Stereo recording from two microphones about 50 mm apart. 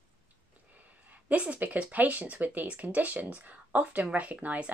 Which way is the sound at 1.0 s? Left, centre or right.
Right.